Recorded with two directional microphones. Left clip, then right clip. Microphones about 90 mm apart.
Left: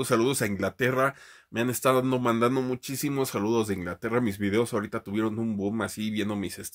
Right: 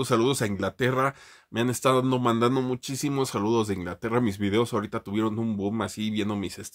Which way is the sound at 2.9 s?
25° right (ahead or behind).